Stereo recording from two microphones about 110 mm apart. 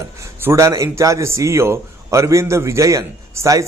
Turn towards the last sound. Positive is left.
turn(degrees=-30)  # may be behind; listen again after turning